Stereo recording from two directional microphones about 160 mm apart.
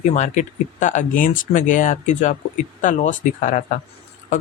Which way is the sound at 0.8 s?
50° left (ahead or behind).